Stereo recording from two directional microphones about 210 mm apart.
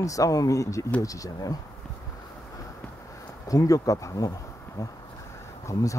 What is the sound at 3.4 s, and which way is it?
Speech, 15° left (ahead or behind).